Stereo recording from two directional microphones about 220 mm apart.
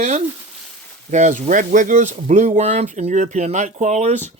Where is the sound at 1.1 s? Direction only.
35° right (ahead or behind).